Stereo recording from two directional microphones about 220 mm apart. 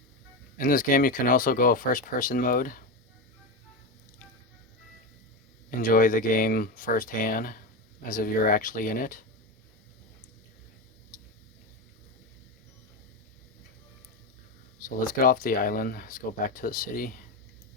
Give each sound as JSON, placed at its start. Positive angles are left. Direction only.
{"t": 0.5, "sound": "speech", "side_deg": 40}
{"t": 5.8, "sound": "speech", "side_deg": 40}
{"t": 14.8, "sound": "speech", "side_deg": 40}